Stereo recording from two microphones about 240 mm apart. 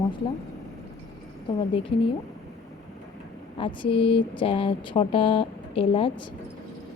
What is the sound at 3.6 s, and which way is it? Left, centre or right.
A woman's voice, left.